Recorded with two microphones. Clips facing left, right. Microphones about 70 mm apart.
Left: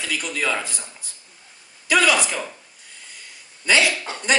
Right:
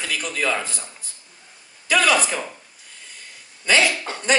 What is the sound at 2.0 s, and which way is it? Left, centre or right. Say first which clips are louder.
Speech: even; right.